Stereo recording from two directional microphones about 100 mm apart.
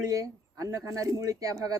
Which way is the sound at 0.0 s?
35° right (ahead or behind).